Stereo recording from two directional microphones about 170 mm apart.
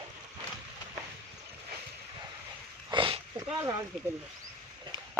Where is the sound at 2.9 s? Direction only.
30° right (ahead or behind).